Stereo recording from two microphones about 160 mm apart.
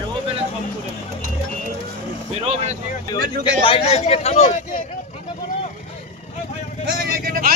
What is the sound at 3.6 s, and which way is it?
Speech, 35° left (ahead or behind).